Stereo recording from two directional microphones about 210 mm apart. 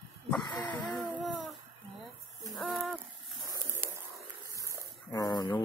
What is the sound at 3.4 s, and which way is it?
Bird, 15° right (ahead or behind).